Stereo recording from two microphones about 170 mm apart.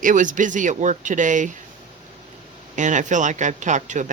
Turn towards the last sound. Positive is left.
turn(degrees=-45)  # may be behind; listen again after turning